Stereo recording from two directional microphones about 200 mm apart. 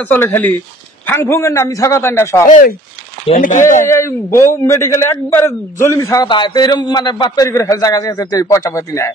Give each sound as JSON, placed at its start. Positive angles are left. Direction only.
{"t": 0.0, "sound": "a man's voice", "side_deg": 10}
{"t": 3.3, "sound": "speech", "side_deg": 40}
{"t": 3.8, "sound": "a man's voice", "side_deg": 15}